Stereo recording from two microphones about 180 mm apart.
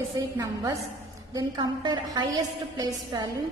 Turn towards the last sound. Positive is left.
turn(degrees=-20)  # may be behind; listen again after turning